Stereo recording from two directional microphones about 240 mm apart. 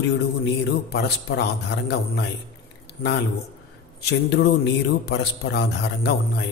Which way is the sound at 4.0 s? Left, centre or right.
Left.